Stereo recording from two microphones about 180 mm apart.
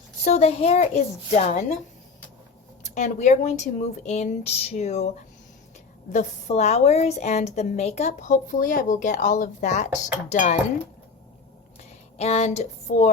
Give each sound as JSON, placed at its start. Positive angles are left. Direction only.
{"t": 0.3, "sound": "a woman's voice", "side_deg": 35}
{"t": 2.8, "sound": "a woman's voice", "side_deg": 40}
{"t": 11.8, "sound": "speech", "side_deg": 35}